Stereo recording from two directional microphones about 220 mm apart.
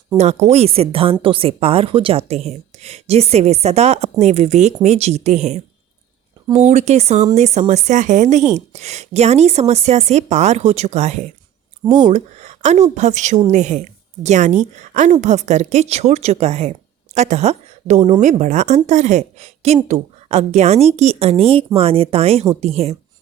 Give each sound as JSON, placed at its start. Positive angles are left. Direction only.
{"t": 0.2, "sound": "a woman's voice", "side_deg": -30}